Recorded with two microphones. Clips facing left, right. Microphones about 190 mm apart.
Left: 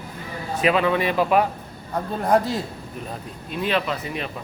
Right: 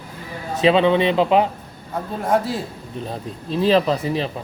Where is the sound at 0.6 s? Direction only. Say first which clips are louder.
Right 5 dB; 25° right (ahead or behind).